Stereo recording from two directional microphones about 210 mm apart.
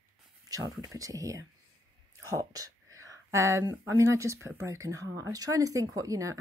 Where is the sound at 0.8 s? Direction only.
15° right (ahead or behind).